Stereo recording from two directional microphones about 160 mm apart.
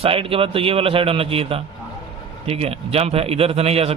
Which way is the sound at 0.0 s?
35° right (ahead or behind).